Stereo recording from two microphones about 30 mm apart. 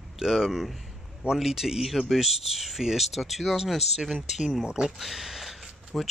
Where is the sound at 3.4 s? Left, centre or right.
Centre.